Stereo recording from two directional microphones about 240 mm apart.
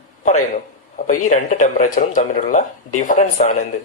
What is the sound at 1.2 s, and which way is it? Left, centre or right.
Speech, left.